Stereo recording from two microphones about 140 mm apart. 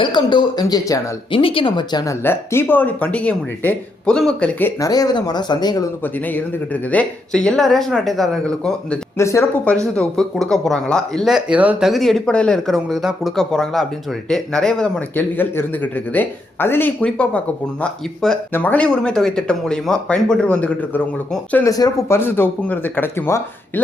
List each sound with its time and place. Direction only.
0.0 s speech: 35° left (ahead or behind)
1.3 s speech: 40° left (ahead or behind)
2.2 s a man's voice: 15° left (ahead or behind)
4.8 s speech: 25° left (ahead or behind)
6.9 s speech: 10° left (ahead or behind)
9.1 s speech: 20° left (ahead or behind)
9.9 s a man's voice: 5° left (ahead or behind)
21.5 s a man's voice: 20° left (ahead or behind)